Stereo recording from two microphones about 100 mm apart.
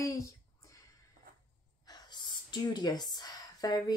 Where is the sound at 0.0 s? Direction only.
35° left (ahead or behind).